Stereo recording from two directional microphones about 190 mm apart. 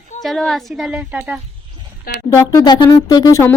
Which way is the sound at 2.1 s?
50° left (ahead or behind).